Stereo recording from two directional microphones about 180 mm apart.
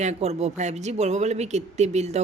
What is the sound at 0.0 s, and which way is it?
Speech, 40° right (ahead or behind).